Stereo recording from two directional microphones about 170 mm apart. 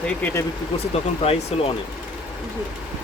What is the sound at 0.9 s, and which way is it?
Speech, 35° left (ahead or behind).